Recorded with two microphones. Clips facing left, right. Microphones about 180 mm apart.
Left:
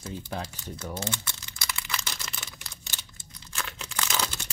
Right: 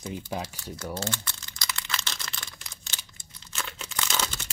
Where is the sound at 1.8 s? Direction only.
5° left (ahead or behind).